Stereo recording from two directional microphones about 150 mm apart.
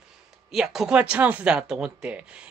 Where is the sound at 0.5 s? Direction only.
5° right (ahead or behind).